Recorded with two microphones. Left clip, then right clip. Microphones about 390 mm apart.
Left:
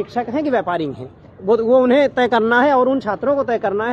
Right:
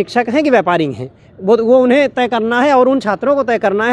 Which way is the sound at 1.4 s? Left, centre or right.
Right.